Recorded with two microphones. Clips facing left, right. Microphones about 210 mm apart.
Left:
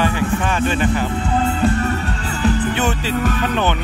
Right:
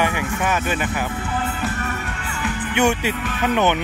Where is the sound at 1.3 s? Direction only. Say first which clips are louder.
Left 9 dB; 25° left (ahead or behind).